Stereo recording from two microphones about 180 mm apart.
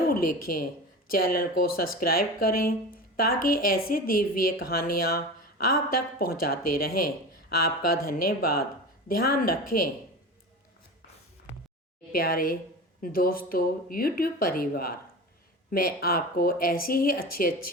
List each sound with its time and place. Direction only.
0.1 s a woman's voice: 55° left (ahead or behind)
12.1 s a woman's voice: 55° left (ahead or behind)